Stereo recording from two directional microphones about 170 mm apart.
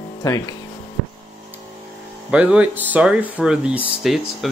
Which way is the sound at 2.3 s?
5° right (ahead or behind).